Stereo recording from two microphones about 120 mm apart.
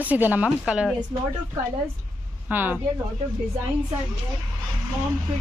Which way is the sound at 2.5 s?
15° right (ahead or behind).